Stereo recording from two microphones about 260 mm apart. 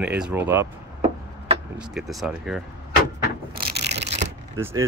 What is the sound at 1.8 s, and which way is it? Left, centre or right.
Speech, centre.